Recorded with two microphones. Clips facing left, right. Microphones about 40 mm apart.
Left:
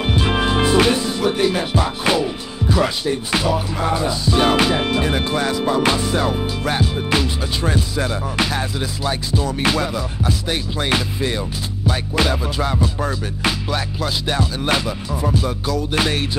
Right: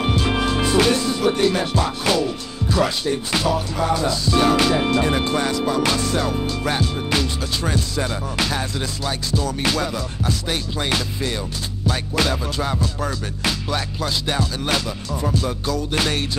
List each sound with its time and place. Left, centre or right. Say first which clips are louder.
0.0 s music: left 1 dB; centre
4.6 s music: even; centre
5.8 s music: left 2 dB; centre